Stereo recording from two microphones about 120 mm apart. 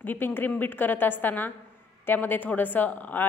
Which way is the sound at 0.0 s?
15° left (ahead or behind).